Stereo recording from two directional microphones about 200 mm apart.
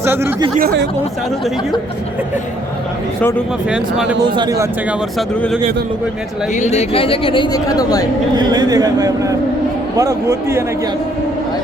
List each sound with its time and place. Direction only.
0.0 s speech: 10° right (ahead or behind)
3.2 s speech: 5° left (ahead or behind)
3.7 s speech: 5° right (ahead or behind)
4.3 s a man's voice: 20° right (ahead or behind)
6.5 s speech: 35° left (ahead or behind); by 8.0 s 20° left (ahead or behind)
8.4 s a man's voice: 20° right (ahead or behind)